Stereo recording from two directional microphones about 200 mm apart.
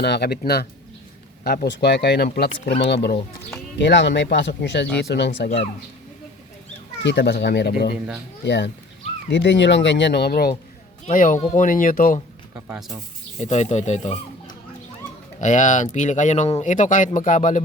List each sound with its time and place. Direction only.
0.0 s speech: 55° left (ahead or behind)
7.0 s speech: 55° left (ahead or behind)
7.9 s speech: 5° right (ahead or behind)
8.4 s speech: 60° left (ahead or behind)
11.0 s speech: 40° left (ahead or behind)
12.5 s speech: 10° right (ahead or behind)
13.4 s speech: 35° left (ahead or behind)
15.4 s speech: 40° left (ahead or behind)